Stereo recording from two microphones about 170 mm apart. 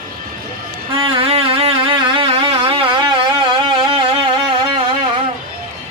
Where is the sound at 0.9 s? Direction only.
30° right (ahead or behind).